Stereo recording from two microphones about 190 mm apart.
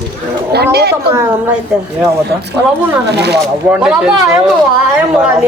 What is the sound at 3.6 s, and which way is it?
Speech, 5° right (ahead or behind).